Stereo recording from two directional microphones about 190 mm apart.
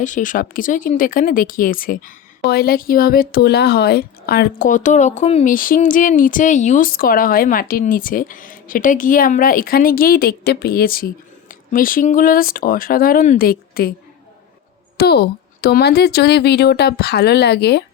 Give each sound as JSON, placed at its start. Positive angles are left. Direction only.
{"t": 0.0, "sound": "speech", "side_deg": 40}
{"t": 14.9, "sound": "speech", "side_deg": 60}